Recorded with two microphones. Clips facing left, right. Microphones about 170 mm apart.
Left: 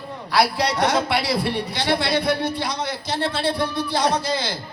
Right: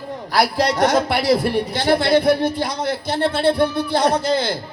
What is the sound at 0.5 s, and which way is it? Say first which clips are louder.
Speech: right 4 dB; 50° right (ahead or behind).